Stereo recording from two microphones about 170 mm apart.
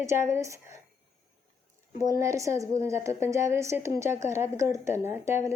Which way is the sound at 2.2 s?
20° right (ahead or behind).